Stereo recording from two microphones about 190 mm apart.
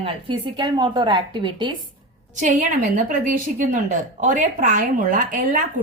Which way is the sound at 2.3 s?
40° right (ahead or behind).